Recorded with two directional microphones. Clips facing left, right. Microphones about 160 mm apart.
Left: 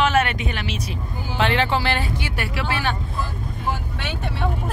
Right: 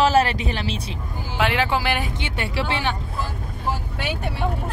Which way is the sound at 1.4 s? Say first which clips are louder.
Left 1 dB; 10° right (ahead or behind).